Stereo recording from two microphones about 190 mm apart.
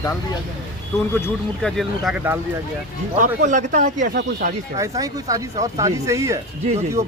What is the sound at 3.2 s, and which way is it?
Speech, 40° right (ahead or behind).